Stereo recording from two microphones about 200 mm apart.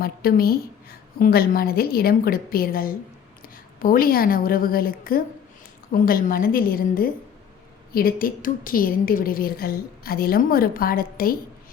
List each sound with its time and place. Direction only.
0.0 s a woman's voice: 50° left (ahead or behind)